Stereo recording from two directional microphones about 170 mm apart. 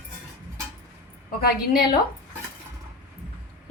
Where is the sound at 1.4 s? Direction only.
60° left (ahead or behind).